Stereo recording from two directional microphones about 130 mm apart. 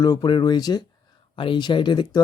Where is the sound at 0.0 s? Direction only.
30° left (ahead or behind).